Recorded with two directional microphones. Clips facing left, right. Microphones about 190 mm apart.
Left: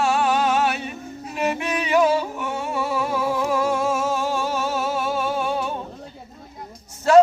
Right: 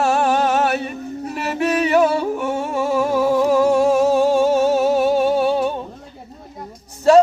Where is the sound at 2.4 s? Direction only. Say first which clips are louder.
Right 5 dB; 45° right (ahead or behind).